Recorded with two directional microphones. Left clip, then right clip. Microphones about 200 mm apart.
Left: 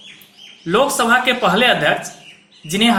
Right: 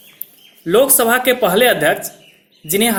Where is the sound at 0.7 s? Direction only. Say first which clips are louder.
Right 2 dB; 45° right (ahead or behind).